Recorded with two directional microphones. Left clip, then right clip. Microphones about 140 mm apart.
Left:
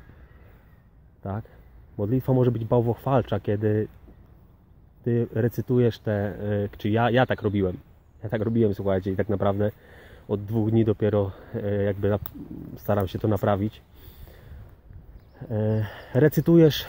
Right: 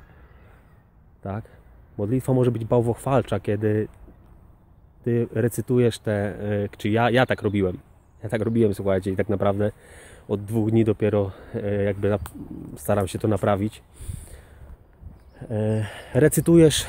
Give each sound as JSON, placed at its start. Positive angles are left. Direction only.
{"t": 2.0, "sound": "speech", "side_deg": -15}
{"t": 5.0, "sound": "speech", "side_deg": -20}
{"t": 15.3, "sound": "speech", "side_deg": -15}